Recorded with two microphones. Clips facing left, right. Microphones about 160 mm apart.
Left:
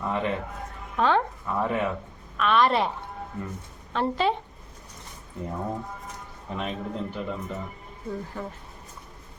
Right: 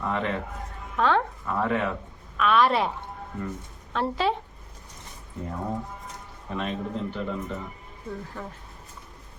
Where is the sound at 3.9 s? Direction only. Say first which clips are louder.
Left 1 dB; centre (ahead or behind).